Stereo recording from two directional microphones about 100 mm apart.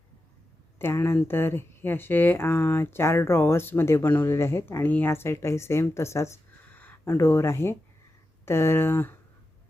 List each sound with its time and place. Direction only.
0.8 s speech: 25° left (ahead or behind)